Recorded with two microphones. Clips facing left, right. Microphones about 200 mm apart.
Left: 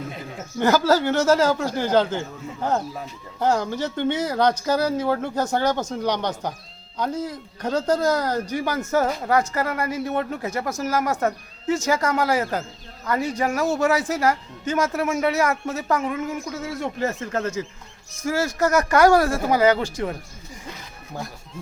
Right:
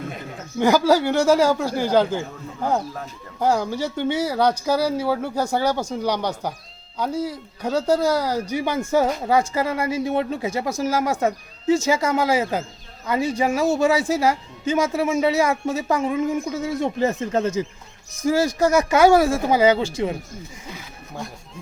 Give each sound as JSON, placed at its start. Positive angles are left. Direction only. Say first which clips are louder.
{"t": 0.6, "sound": "speech", "louder": "right 2 dB", "side_deg": -10}
{"t": 8.6, "sound": "speech", "louder": "right 3 dB", "side_deg": 5}
{"t": 9.8, "sound": "a woman's voice", "louder": "right 3 dB", "side_deg": -25}
{"t": 16.0, "sound": "a woman's voice", "louder": "right 4 dB", "side_deg": -30}
{"t": 16.6, "sound": "speech", "louder": "right 4 dB", "side_deg": -15}
{"t": 18.9, "sound": "a woman's voice", "louder": "right 1 dB", "side_deg": -20}
{"t": 19.2, "sound": "speech", "louder": "right 3 dB", "side_deg": -10}
{"t": 19.5, "sound": "a woman's voice", "louder": "right 1 dB", "side_deg": -25}